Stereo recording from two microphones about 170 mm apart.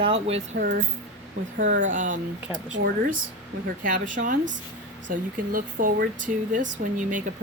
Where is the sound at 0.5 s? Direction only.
80° right.